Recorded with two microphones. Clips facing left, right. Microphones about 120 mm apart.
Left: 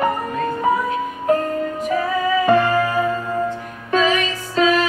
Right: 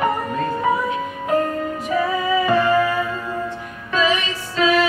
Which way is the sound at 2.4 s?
45° left (ahead or behind).